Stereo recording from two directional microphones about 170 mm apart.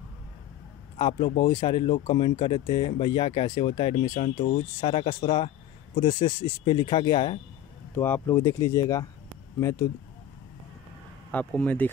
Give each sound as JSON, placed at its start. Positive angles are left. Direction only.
{"t": 0.9, "sound": "speech", "side_deg": 30}
{"t": 3.9, "sound": "speech", "side_deg": 45}
{"t": 4.8, "sound": "speech", "side_deg": 35}
{"t": 7.9, "sound": "speech", "side_deg": 10}
{"t": 11.3, "sound": "speech", "side_deg": 10}